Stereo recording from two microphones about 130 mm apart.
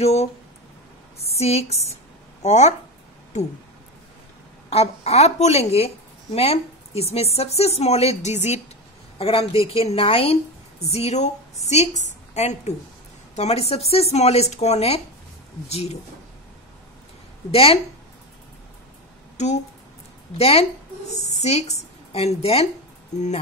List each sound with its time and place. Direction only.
0.0 s speech: 55° left (ahead or behind)
1.3 s speech: 50° left (ahead or behind)
4.6 s speech: 50° left (ahead or behind)
9.2 s a woman's voice: 45° left (ahead or behind)
17.5 s speech: 50° left (ahead or behind)
19.3 s speech: 65° left (ahead or behind)
20.3 s speech: 50° left (ahead or behind)